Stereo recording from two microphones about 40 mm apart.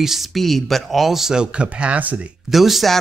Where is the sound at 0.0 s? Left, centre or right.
Centre.